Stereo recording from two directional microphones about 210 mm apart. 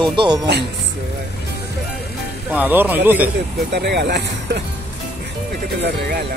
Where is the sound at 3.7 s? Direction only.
50° right (ahead or behind).